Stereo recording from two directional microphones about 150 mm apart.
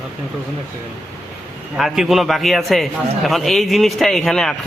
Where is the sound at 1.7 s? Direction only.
Centre (ahead or behind).